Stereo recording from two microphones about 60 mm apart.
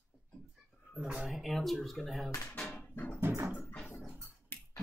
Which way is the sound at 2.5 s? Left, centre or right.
Left.